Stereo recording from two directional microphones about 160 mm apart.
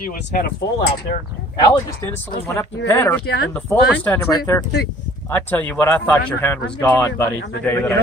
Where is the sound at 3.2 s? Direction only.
90° left.